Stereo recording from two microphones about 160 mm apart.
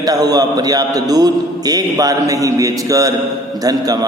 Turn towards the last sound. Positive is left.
turn(degrees=-20)  # may be behind; listen again after turning